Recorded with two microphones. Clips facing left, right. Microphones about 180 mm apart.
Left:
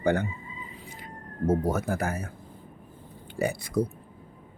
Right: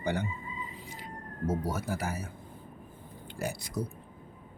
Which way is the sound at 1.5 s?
50° left (ahead or behind).